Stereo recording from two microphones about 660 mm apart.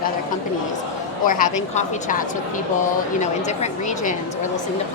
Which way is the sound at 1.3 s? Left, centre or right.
Centre.